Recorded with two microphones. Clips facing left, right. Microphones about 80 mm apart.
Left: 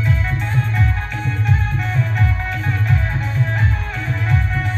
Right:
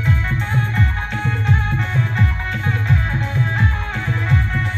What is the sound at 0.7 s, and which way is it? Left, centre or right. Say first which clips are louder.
Music: right 1 dB; right.